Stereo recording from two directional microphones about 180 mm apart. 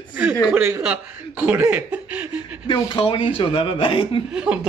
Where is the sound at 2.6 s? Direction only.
25° left (ahead or behind).